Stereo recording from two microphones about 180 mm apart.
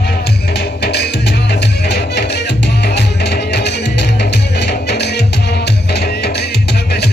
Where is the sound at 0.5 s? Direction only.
65° left (ahead or behind).